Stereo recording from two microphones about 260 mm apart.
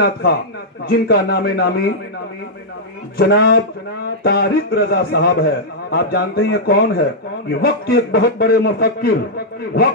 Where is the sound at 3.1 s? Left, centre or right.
Left.